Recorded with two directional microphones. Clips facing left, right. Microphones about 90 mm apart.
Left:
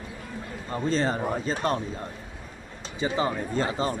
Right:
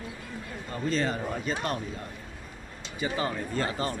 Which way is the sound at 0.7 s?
30° left (ahead or behind).